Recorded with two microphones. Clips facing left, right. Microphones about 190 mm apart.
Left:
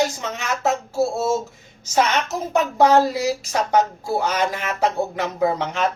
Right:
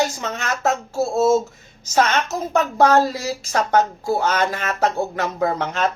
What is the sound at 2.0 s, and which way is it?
A woman's voice, 15° left (ahead or behind).